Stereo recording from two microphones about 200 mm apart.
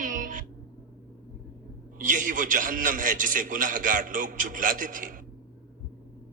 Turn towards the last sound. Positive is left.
turn(degrees=-40)  # may be behind; listen again after turning